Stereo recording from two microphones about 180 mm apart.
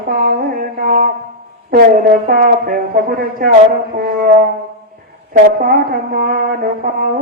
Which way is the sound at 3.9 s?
55° right (ahead or behind).